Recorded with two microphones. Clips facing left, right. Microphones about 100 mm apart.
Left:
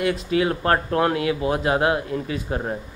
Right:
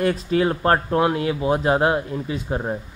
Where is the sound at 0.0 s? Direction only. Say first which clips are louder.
Right 2 dB; 35° right (ahead or behind).